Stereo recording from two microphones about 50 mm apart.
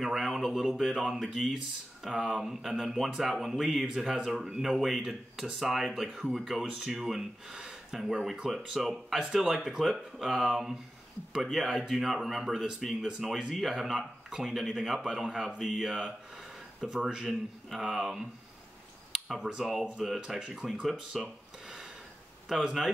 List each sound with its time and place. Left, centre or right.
0.0 s speech: centre
2.0 s speech: centre
15.0 s speech: centre
19.2 s speech: centre
20.3 s speech: centre
20.9 s a sound: centre
22.5 s speech: centre